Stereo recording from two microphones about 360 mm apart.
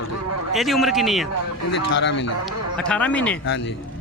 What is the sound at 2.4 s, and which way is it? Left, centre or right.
Speech, centre.